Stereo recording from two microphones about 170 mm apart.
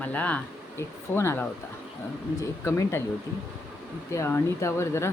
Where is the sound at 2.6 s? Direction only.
15° left (ahead or behind).